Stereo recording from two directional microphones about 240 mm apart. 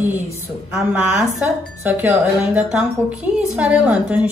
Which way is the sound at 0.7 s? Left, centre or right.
Centre.